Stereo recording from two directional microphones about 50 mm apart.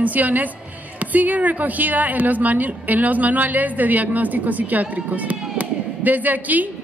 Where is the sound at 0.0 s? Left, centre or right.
Right.